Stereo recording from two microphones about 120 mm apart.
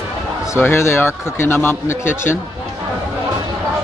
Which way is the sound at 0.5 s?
20° left (ahead or behind).